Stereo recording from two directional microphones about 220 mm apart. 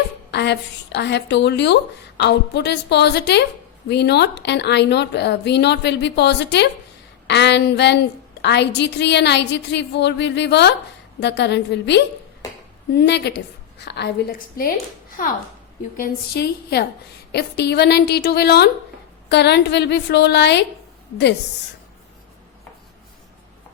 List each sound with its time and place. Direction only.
0.3 s a woman's voice: 50° left (ahead or behind)